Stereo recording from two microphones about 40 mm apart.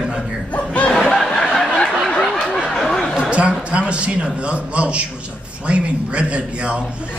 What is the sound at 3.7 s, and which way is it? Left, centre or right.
A man's voice, right.